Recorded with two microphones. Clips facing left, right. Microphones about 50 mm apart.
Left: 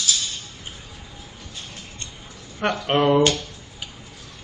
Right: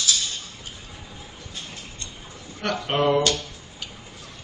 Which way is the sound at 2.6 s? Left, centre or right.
Left.